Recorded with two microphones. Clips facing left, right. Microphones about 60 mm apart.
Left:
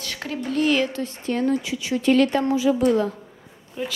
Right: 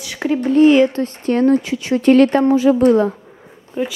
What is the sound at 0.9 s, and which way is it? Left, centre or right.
A woman's voice, right.